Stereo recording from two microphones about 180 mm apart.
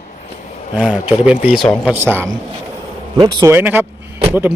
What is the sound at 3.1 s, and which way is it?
Speech, 25° right (ahead or behind).